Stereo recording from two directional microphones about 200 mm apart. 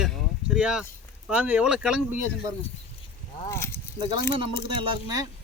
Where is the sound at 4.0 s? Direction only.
25° right (ahead or behind).